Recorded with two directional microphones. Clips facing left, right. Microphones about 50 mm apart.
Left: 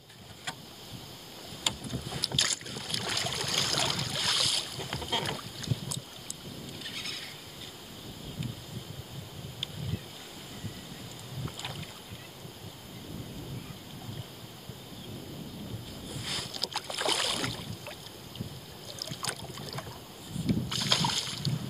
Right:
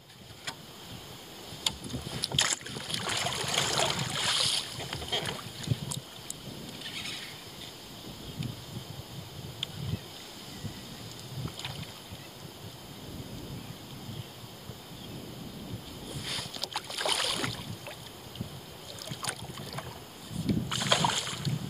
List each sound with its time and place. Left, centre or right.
0.5 s vehicle: centre
2.3 s boat: right
2.6 s boat: centre
6.8 s a sound: centre
16.2 s boat: centre
18.9 s boat: centre
20.7 s splash: centre